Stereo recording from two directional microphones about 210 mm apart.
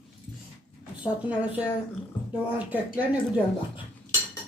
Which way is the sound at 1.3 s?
5° right (ahead or behind).